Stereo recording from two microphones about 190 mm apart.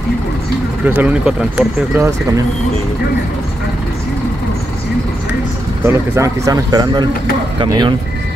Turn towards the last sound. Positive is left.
turn(degrees=-25)  # may be behind; listen again after turning